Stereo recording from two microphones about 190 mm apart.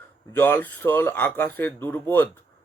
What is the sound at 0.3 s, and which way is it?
Speech, 10° left (ahead or behind).